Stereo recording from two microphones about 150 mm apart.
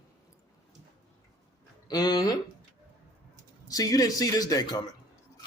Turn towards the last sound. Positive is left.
turn(degrees=25)  # may be behind; listen again after turning